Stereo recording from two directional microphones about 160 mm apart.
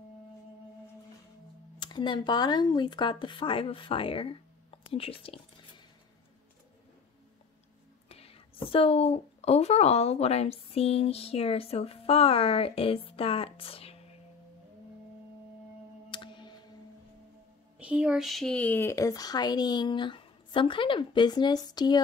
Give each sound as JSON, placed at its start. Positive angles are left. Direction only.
{"t": 1.8, "sound": "speech", "side_deg": 30}
{"t": 8.1, "sound": "a woman's voice", "side_deg": 35}
{"t": 16.1, "sound": "music", "side_deg": 30}
{"t": 17.7, "sound": "speech", "side_deg": -5}